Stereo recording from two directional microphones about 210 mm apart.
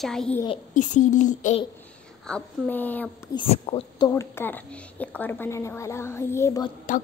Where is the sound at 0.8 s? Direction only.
35° left (ahead or behind).